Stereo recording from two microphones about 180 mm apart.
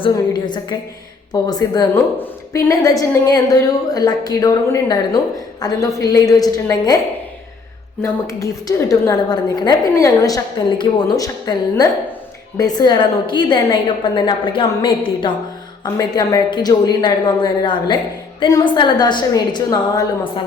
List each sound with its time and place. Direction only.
0.0 s a woman's voice: 25° left (ahead or behind)
8.0 s a woman's voice: 20° left (ahead or behind)